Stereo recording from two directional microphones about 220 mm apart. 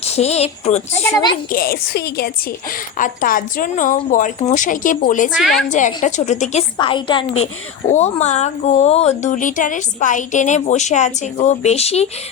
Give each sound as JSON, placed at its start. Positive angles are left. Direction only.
{"t": 0.0, "sound": "a woman's voice", "side_deg": 30}
{"t": 1.5, "sound": "a woman's voice", "side_deg": 45}
{"t": 5.4, "sound": "a woman's voice", "side_deg": 0}
{"t": 5.7, "sound": "a woman's voice", "side_deg": 35}